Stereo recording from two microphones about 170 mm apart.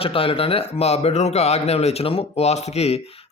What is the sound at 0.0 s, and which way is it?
Speech, 35° left (ahead or behind).